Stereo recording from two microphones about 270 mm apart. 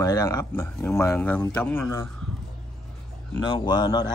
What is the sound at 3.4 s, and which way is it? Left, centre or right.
Speech, centre.